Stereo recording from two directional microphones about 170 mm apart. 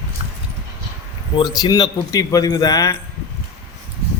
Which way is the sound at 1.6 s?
25° left (ahead or behind).